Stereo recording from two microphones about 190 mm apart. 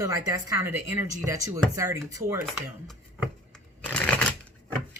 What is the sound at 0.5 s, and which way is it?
Speech, 10° right (ahead or behind).